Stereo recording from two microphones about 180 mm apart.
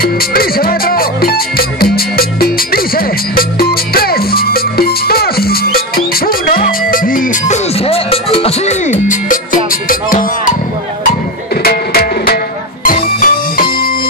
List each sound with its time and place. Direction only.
0.0 s music: 55° left (ahead or behind)
11.6 s music: 60° left (ahead or behind)